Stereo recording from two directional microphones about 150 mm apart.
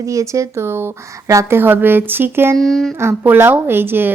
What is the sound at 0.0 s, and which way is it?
Speech, 20° right (ahead or behind).